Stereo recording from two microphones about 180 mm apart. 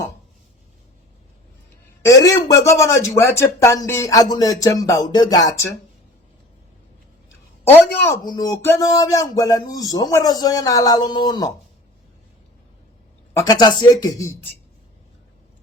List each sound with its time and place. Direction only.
2.0 s speech: 20° left (ahead or behind)
7.7 s speech: 20° left (ahead or behind)
13.3 s speech: 20° left (ahead or behind)